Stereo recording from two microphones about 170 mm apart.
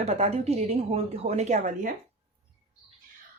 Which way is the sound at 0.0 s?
40° right (ahead or behind).